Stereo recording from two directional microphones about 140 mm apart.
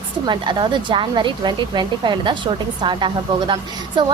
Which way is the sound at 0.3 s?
35° right (ahead or behind).